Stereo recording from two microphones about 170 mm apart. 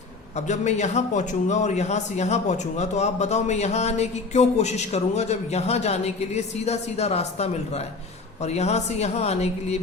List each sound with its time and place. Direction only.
0.3 s a man's voice: 45° left (ahead or behind)